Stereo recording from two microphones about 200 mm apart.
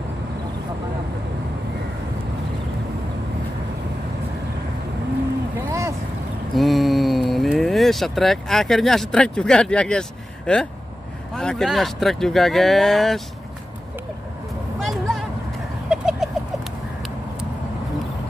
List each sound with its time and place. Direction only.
5.7 s vehicle: 15° right (ahead or behind)
6.5 s speech: centre (ahead or behind)
14.8 s a sound: centre (ahead or behind)
15.9 s chicken: centre (ahead or behind)